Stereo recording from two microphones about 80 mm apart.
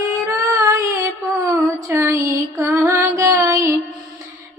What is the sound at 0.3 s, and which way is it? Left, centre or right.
Child singing, right.